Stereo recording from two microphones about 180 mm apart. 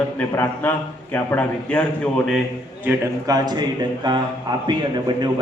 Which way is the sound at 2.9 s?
20° right (ahead or behind).